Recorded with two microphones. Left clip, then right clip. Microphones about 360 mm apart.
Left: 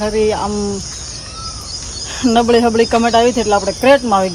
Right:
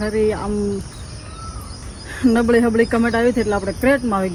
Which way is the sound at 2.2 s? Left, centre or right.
Centre.